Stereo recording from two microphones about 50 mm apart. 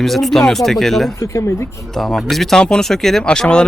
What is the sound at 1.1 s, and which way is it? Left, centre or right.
Speech, left.